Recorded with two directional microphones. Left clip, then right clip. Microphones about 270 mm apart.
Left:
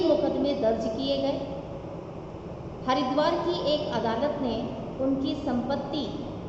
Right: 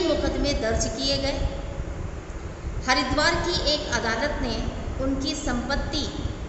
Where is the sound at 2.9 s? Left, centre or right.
Right.